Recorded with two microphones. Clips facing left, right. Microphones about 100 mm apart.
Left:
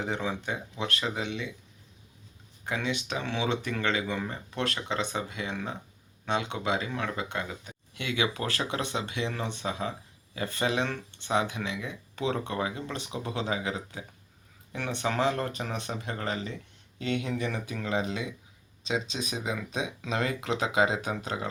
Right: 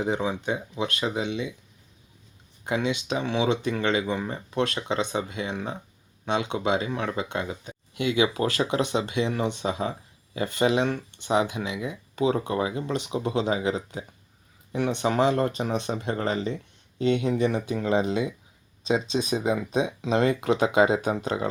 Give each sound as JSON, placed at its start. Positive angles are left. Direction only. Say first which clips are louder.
{"t": 0.0, "sound": "speech", "louder": "right 5 dB", "side_deg": -15}
{"t": 2.6, "sound": "speech", "louder": "right 5 dB", "side_deg": -20}
{"t": 20.0, "sound": "speech", "louder": "right 7 dB", "side_deg": -25}